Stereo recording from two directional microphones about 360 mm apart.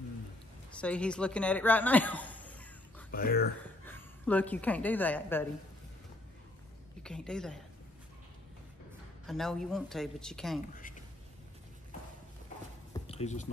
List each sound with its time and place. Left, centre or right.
0.7 s speech: centre
3.1 s speech: left
3.8 s a woman's voice: centre
7.0 s a woman's voice: centre
9.2 s speech: centre
12.9 s a sound: centre